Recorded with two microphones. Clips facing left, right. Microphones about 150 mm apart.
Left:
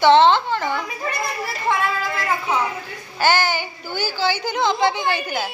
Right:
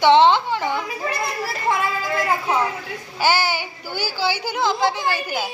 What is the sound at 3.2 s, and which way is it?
A child's voice, 10° right (ahead or behind).